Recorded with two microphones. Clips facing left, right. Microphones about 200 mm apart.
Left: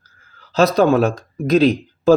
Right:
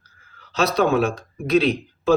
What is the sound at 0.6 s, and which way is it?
Speech, 40° left (ahead or behind).